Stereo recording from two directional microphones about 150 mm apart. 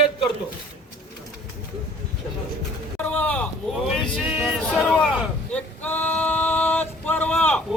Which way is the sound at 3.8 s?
5° right (ahead or behind).